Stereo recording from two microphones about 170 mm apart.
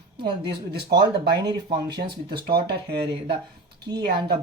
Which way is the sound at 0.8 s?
70° right (ahead or behind).